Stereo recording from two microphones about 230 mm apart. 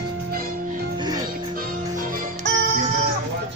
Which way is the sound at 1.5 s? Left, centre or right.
Right.